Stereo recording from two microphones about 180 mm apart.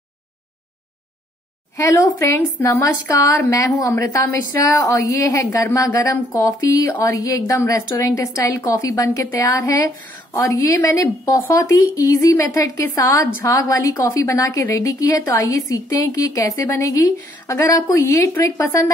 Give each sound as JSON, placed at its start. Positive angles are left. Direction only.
{"t": 1.8, "sound": "a woman's voice", "side_deg": 15}